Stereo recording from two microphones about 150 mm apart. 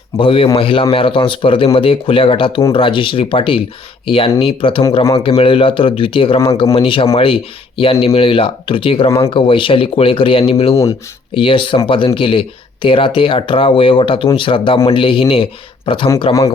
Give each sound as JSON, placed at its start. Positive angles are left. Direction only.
{"t": 0.2, "sound": "speech", "side_deg": 35}